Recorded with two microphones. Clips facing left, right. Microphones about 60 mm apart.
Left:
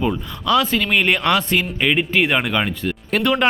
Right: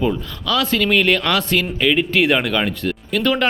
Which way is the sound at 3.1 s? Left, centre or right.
Left.